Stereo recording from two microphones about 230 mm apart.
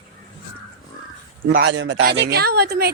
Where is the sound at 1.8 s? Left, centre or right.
Right.